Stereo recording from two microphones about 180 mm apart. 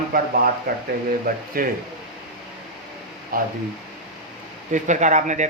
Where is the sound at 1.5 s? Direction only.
55° right (ahead or behind).